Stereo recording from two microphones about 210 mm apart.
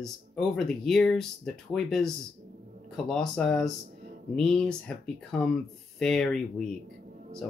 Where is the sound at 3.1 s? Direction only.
5° left (ahead or behind).